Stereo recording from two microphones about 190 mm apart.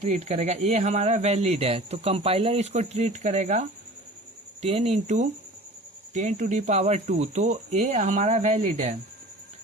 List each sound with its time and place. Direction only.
0.0 s speech: 35° right (ahead or behind)